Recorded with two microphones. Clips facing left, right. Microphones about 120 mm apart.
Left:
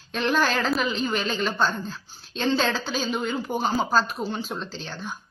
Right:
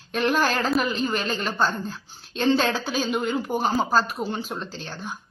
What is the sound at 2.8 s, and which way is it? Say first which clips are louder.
Speech: right 2 dB; 10° right (ahead or behind).